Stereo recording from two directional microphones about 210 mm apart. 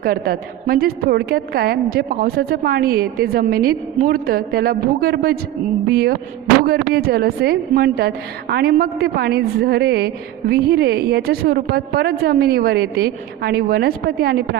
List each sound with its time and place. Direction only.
0.0 s a woman's voice: 45° right (ahead or behind)